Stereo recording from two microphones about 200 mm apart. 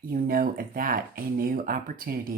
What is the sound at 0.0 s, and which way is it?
Speech, 45° right (ahead or behind).